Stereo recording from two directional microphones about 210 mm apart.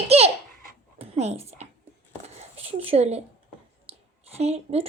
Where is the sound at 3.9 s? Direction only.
30° right (ahead or behind).